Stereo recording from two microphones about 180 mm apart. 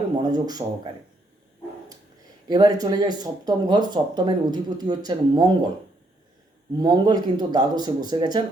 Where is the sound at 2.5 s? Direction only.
20° right (ahead or behind).